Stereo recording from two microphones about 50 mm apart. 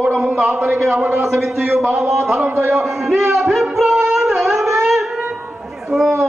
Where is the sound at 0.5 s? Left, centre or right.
Right.